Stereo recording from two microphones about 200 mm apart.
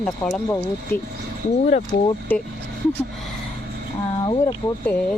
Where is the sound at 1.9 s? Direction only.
55° left (ahead or behind).